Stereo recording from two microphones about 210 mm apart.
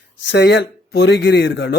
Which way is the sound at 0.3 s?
55° left (ahead or behind).